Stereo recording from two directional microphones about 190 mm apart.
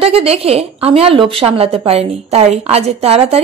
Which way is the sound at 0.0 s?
30° right (ahead or behind).